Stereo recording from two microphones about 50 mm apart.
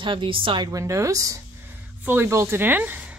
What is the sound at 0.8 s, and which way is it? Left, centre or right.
Speech, right.